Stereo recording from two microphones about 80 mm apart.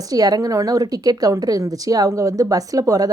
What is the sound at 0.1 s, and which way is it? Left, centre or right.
A woman's voice, right.